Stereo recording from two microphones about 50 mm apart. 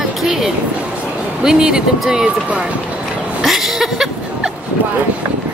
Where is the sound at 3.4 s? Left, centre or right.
Centre.